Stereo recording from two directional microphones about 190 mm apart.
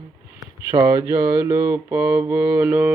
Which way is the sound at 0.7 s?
15° right (ahead or behind).